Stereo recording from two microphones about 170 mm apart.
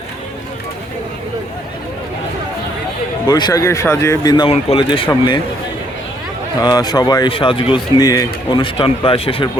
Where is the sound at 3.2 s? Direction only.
25° left (ahead or behind).